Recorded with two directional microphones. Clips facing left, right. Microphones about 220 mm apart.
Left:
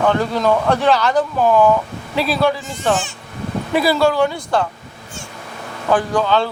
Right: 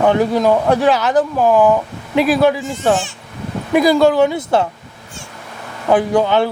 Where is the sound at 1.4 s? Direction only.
15° right (ahead or behind).